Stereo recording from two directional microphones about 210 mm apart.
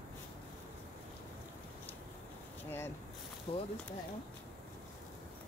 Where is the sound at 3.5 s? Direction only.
25° left (ahead or behind).